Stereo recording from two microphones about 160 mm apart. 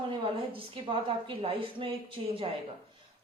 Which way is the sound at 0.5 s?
35° right (ahead or behind).